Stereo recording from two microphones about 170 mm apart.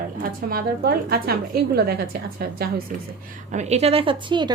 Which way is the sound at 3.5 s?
40° right (ahead or behind).